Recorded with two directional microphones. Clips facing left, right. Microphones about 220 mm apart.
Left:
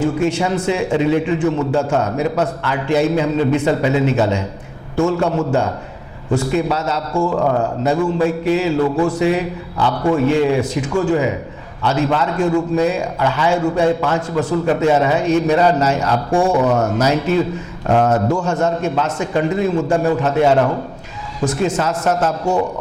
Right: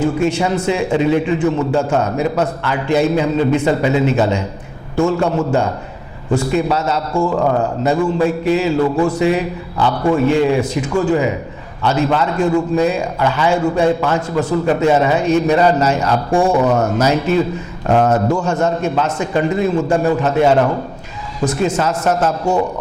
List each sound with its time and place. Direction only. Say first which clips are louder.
0.0 s a man's voice: right 1 dB; 10° right (ahead or behind)
7.3 s a man's voice: right 1 dB; 25° right (ahead or behind)
8.2 s a man's voice: right 1 dB; 10° right (ahead or behind)
9.9 s a man's voice: right 1 dB; 30° right (ahead or behind)
10.2 s a man's voice: right 1 dB; 15° right (ahead or behind)
16.6 s a man's voice: right 1 dB; 25° right (ahead or behind)
17.0 s a man's voice: right 1 dB; 10° right (ahead or behind)
17.8 s a man's voice: right 1 dB; 25° right (ahead or behind)
18.6 s a man's voice: right 1 dB; 10° right (ahead or behind)